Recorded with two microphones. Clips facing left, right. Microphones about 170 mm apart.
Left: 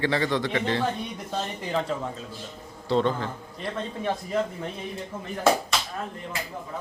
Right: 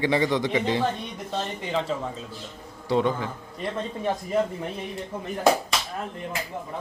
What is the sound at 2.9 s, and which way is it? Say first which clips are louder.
Speech: even; 10° right (ahead or behind).